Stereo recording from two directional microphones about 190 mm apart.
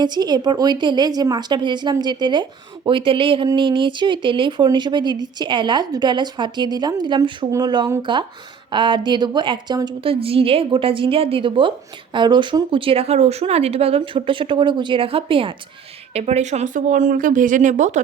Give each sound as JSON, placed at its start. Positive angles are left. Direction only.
{"t": 0.0, "sound": "a woman's voice", "side_deg": -20}